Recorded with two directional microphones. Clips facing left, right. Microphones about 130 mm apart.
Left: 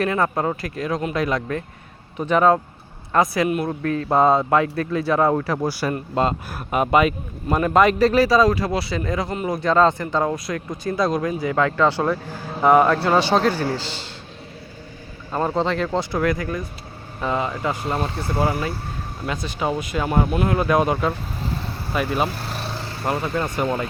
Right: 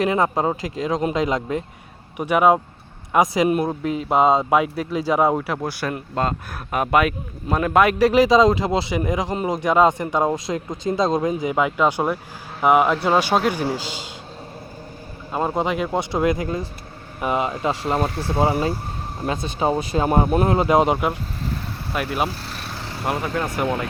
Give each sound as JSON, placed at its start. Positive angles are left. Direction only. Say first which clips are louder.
{"t": 0.0, "sound": "speech", "louder": "right 1 dB", "side_deg": -20}
{"t": 5.8, "sound": "speech", "louder": "left 1 dB", "side_deg": 5}
{"t": 8.0, "sound": "speech", "louder": "right 1 dB", "side_deg": -15}
{"t": 15.3, "sound": "speech", "louder": "left 1 dB", "side_deg": -10}
{"t": 19.2, "sound": "speech", "louder": "right 3 dB", "side_deg": -25}
{"t": 20.5, "sound": "speech", "louder": "right 1 dB", "side_deg": -25}
{"t": 21.9, "sound": "speech", "louder": "left 1 dB", "side_deg": -5}